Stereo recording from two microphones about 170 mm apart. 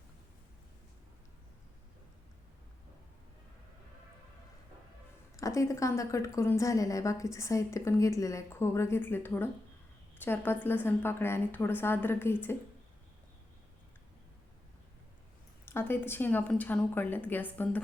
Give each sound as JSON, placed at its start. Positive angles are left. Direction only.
{"t": 5.4, "sound": "a woman's voice", "side_deg": 20}
{"t": 15.6, "sound": "a woman's voice", "side_deg": 15}